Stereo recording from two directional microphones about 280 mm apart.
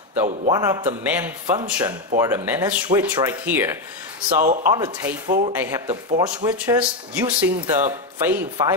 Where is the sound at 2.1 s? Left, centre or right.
Centre.